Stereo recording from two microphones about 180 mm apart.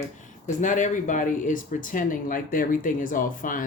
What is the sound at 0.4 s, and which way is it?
Speech, 45° left (ahead or behind).